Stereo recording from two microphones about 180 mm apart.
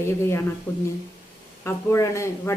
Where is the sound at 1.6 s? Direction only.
15° left (ahead or behind).